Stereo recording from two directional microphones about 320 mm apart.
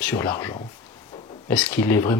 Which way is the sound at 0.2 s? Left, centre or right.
Centre.